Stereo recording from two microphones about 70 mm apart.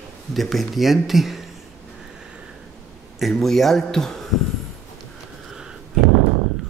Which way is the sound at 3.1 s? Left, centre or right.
Centre.